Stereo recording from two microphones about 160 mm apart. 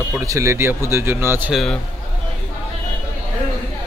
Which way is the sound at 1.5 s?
5° left (ahead or behind).